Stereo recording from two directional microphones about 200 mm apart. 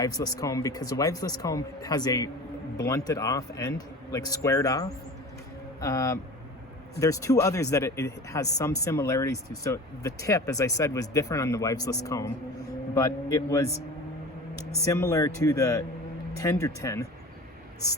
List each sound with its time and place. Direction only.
0.0 s a man's voice: 20° left (ahead or behind)
14.8 s speech: 15° left (ahead or behind)